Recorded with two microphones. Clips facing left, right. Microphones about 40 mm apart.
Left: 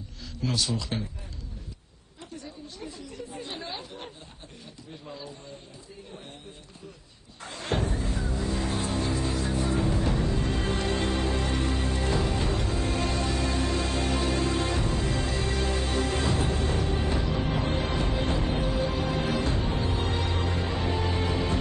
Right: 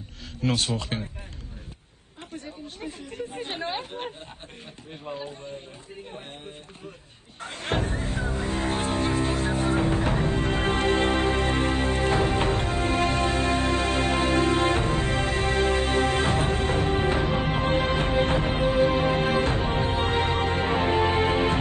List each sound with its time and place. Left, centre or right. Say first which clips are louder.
0.4 s speech: right 3 dB; right
2.3 s speech: right 3 dB; right
7.4 s music: right 2 dB; right